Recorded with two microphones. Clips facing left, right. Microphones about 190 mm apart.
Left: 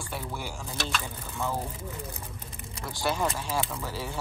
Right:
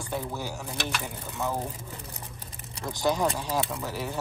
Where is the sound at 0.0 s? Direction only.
20° right (ahead or behind).